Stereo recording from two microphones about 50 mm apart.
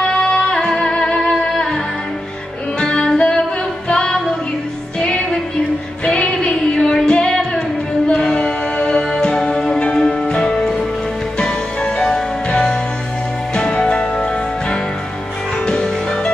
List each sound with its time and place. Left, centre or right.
0.0 s music: centre
2.8 s music: centre